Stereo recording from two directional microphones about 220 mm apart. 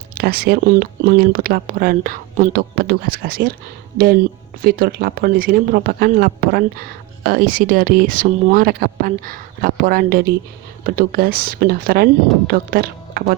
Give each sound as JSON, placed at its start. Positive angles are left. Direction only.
{"t": 0.1, "sound": "speech", "side_deg": -40}